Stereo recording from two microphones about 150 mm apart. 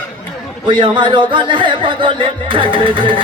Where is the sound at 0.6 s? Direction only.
35° right (ahead or behind).